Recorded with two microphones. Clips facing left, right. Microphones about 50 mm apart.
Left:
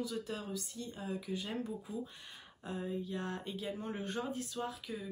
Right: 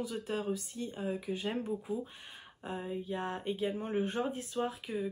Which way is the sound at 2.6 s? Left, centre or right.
Right.